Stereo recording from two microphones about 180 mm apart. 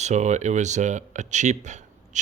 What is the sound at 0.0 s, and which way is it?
Speech, 40° right (ahead or behind).